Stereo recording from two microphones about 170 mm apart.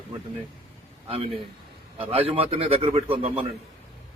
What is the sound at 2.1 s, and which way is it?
A man's voice, 35° right (ahead or behind).